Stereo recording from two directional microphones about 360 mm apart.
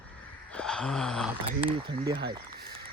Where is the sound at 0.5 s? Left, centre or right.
Centre.